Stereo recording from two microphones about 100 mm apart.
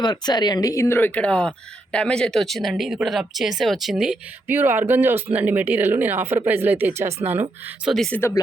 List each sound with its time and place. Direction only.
0.0 s speech: 45° left (ahead or behind); by 4.2 s 10° right (ahead or behind)
4.4 s speech: 20° right (ahead or behind)
7.9 s speech: 5° left (ahead or behind)
8.1 s speech: 20° left (ahead or behind)